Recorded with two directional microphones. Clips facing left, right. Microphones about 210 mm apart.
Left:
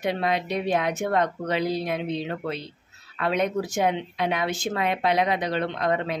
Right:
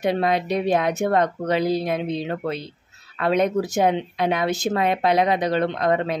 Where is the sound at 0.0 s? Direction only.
40° right (ahead or behind).